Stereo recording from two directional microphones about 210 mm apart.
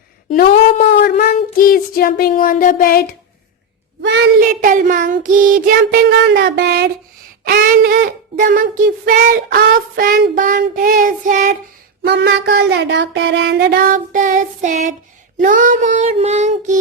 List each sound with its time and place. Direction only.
0.3 s child singing: 45° left (ahead or behind)
4.0 s child singing: 50° right (ahead or behind)
7.4 s child singing: 40° right (ahead or behind)
12.0 s child singing: 55° right (ahead or behind); by 16.7 s 30° right (ahead or behind)